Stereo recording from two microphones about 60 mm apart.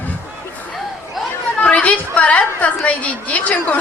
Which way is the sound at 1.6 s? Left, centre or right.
Left.